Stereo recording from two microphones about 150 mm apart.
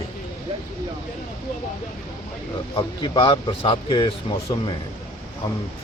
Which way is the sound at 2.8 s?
35° left (ahead or behind).